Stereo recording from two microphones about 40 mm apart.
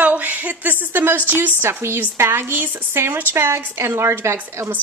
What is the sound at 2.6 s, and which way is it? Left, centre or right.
Speech, right.